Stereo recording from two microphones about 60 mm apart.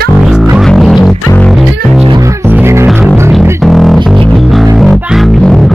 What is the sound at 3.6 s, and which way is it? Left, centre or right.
Music, centre.